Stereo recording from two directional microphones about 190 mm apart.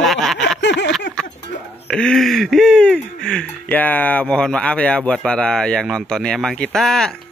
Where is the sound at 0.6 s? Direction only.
65° left (ahead or behind).